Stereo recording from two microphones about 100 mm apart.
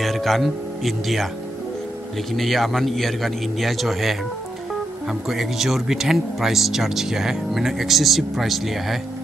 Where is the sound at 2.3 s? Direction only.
Centre (ahead or behind).